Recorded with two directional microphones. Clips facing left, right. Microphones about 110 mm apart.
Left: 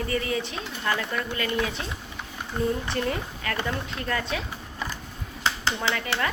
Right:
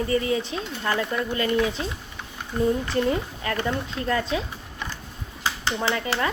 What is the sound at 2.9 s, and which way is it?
A woman's voice, 25° right (ahead or behind).